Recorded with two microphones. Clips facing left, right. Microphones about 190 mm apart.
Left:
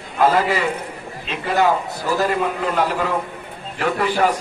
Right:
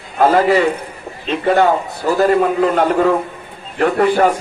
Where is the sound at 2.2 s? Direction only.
45° right (ahead or behind).